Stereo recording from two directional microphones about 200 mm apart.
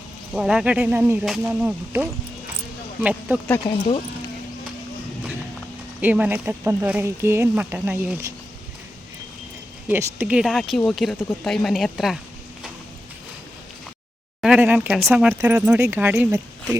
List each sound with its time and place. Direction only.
0.3 s speech: 5° right (ahead or behind)
3.7 s speech: 25° left (ahead or behind)
6.0 s speech: 10° right (ahead or behind)
9.9 s speech: 10° right (ahead or behind)
14.4 s speech: 5° right (ahead or behind)